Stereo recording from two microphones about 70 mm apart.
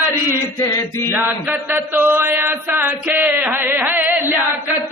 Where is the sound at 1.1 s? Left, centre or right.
Right.